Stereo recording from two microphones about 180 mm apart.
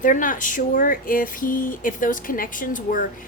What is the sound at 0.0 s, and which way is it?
Speech, 45° left (ahead or behind).